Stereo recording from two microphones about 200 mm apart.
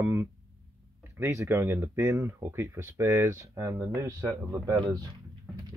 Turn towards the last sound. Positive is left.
turn(degrees=-20)  # may be behind; listen again after turning